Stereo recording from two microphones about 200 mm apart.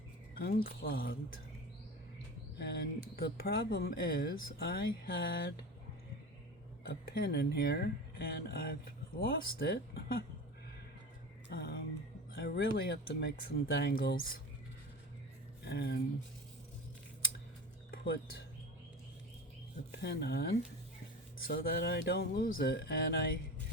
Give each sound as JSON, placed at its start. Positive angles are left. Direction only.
{"t": 0.3, "sound": "speech", "side_deg": 50}
{"t": 2.6, "sound": "speech", "side_deg": 50}
{"t": 7.1, "sound": "speech", "side_deg": 50}
{"t": 11.4, "sound": "music", "side_deg": 55}
{"t": 12.3, "sound": "speech", "side_deg": 50}
{"t": 15.6, "sound": "speech", "side_deg": 55}
{"t": 17.9, "sound": "speech", "side_deg": 50}
{"t": 20.0, "sound": "speech", "side_deg": 55}